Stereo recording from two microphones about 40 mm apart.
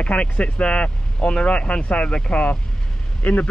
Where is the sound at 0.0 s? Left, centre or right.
Left.